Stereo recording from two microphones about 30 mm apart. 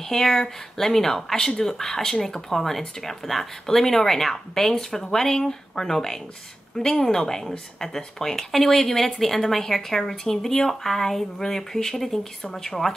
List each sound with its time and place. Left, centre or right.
0.1 s speech: centre